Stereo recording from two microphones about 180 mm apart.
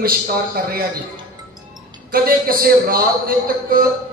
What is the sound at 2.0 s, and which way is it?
A man's voice, 55° right (ahead or behind).